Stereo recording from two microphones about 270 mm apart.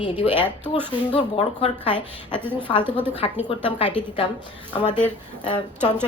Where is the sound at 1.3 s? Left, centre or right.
Left.